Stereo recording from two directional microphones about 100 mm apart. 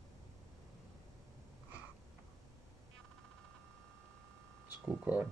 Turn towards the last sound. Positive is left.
turn(degrees=-15)  # may be behind; listen again after turning